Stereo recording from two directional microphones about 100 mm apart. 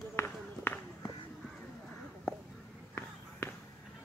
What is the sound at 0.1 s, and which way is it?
Run, 20° left (ahead or behind).